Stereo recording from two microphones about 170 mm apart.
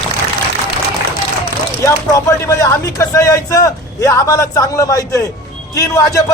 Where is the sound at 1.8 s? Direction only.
20° left (ahead or behind).